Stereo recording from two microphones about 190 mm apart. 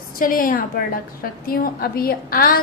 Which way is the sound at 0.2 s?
45° left (ahead or behind).